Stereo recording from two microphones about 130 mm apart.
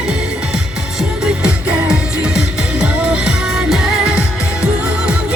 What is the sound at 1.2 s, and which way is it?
Music, 5° right (ahead or behind).